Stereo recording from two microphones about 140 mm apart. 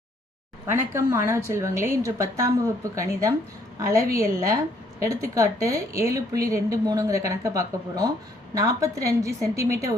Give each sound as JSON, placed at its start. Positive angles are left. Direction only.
{"t": 0.7, "sound": "speech", "side_deg": -15}